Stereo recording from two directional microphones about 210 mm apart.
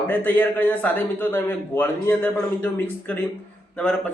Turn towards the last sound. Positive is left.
turn(degrees=5)  # may be behind; listen again after turning